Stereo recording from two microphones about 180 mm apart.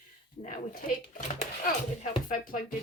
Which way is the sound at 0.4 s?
50° left (ahead or behind).